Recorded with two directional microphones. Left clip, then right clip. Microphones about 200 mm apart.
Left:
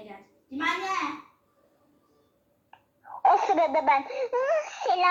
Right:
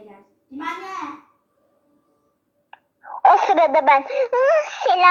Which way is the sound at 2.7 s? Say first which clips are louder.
Right 8 dB; 50° right (ahead or behind).